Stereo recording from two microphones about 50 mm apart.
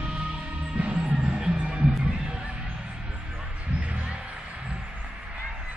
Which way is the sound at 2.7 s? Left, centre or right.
Right.